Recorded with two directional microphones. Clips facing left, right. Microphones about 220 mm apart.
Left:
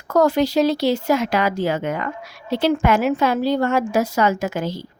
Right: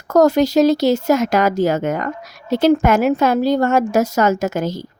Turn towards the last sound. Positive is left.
turn(degrees=-45)  # may be behind; listen again after turning